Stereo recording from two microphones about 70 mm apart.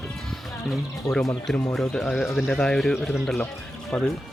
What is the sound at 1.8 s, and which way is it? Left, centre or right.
Speech, centre.